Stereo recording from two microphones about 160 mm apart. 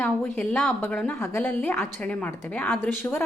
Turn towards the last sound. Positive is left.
turn(degrees=15)  # may be behind; listen again after turning